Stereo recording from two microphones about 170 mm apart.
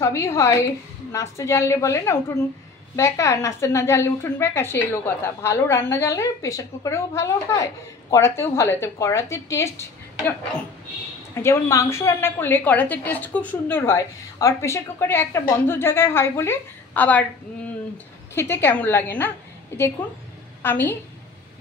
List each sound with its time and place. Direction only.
0.0 s a woman's voice: 15° left (ahead or behind)
11.3 s a woman's voice: 15° left (ahead or behind)
18.3 s a woman's voice: 15° left (ahead or behind)